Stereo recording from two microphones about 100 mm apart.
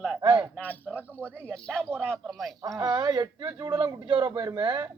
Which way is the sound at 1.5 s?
5° left (ahead or behind).